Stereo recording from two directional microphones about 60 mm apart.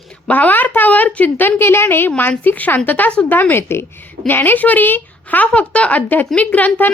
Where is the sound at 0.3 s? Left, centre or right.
Left.